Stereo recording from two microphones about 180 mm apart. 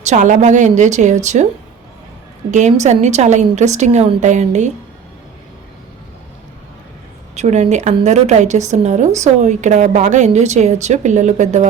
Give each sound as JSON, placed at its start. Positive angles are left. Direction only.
{"t": 0.0, "sound": "a woman's voice", "side_deg": -40}
{"t": 2.5, "sound": "a woman's voice", "side_deg": -40}
{"t": 7.3, "sound": "a woman's voice", "side_deg": -40}